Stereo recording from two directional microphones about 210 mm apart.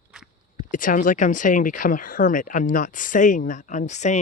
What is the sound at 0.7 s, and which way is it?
Speech, 40° left (ahead or behind).